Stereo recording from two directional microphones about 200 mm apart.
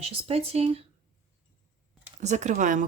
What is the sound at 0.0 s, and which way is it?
Speech, 30° right (ahead or behind).